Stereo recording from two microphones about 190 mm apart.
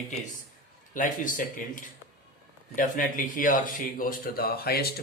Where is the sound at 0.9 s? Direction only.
45° left (ahead or behind).